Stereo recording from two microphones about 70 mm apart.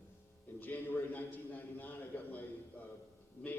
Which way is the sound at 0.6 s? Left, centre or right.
Left.